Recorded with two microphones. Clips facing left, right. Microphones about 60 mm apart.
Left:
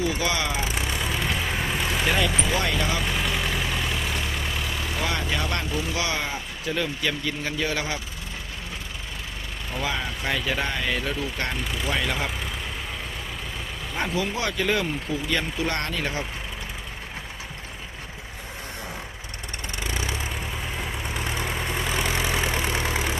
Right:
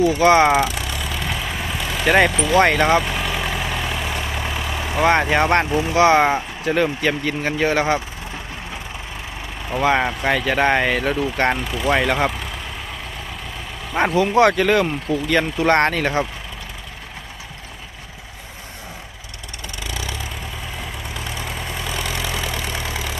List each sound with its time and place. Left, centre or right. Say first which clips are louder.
0.1 s speech: right 13 dB; right
0.7 s vehicle: right 1 dB; left
1.2 s vehicle: right 1 dB; centre
2.0 s speech: right 10 dB; right
2.3 s speech: right 6 dB; centre
2.6 s speech: right 16 dB; right
3.0 s vehicle: right 3 dB; centre
5.2 s speech: right 11 dB; right
9.7 s speech: right 11 dB; right
11.6 s speech: right 5 dB; centre
11.9 s speech: right 10 dB; right
13.9 s speech: right 11 dB; right
19.8 s vehicle: right 1 dB; left